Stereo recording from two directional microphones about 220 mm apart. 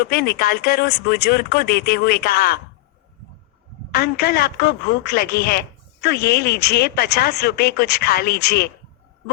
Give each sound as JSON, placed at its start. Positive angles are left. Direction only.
{"t": 0.1, "sound": "speech", "side_deg": 45}
{"t": 3.9, "sound": "speech", "side_deg": 45}